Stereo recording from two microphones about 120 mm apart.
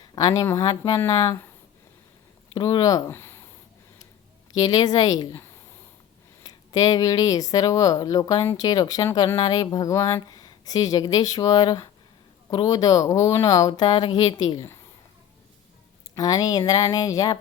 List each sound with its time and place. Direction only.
0.0 s speech: 35° left (ahead or behind)
2.5 s speech: 35° left (ahead or behind)
3.1 s speech: 20° left (ahead or behind)
4.5 s speech: 35° left (ahead or behind)
16.1 s speech: 30° left (ahead or behind)